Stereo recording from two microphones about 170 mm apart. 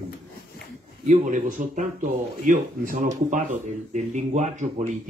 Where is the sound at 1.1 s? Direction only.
45° right (ahead or behind).